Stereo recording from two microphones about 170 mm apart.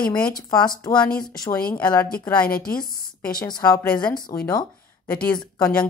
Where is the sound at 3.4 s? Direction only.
25° left (ahead or behind).